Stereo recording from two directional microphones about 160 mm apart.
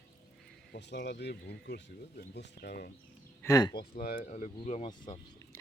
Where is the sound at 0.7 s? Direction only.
90° left.